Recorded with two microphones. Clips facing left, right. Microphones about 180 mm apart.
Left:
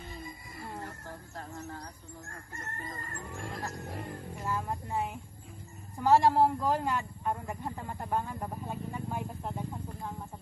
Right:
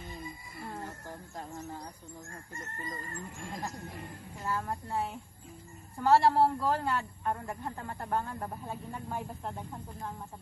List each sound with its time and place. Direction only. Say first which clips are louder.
2.2 s chicken: left 2 dB; 65° left (ahead or behind)
4.4 s a man's voice: right 1 dB; 10° left (ahead or behind)